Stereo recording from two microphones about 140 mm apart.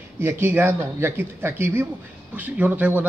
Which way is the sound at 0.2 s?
15° right (ahead or behind).